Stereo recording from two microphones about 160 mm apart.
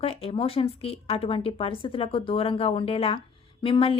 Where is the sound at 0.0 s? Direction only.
35° left (ahead or behind).